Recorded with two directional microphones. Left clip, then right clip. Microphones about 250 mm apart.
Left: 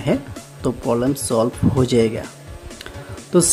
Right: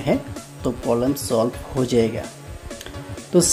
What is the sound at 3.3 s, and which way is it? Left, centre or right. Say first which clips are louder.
Speech: left 1 dB; centre.